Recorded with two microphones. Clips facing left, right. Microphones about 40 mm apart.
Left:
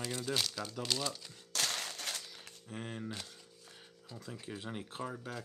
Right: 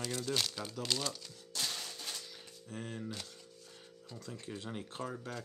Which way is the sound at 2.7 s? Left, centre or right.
Centre.